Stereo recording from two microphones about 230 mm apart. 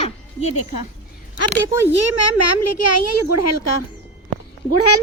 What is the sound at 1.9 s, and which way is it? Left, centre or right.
A child's voice, left.